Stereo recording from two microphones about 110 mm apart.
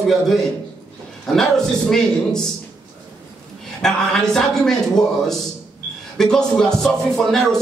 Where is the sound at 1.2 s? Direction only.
5° left (ahead or behind).